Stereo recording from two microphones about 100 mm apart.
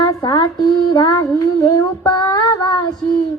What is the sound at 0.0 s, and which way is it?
Child singing, 40° left (ahead or behind).